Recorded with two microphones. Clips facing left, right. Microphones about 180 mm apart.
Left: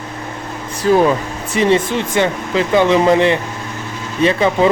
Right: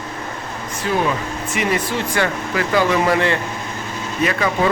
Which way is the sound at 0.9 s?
40° left (ahead or behind).